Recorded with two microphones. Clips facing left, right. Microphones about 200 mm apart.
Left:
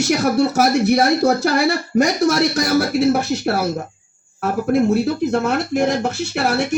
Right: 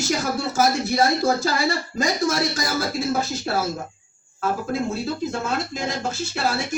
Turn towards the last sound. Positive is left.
turn(degrees=65)  # may be behind; listen again after turning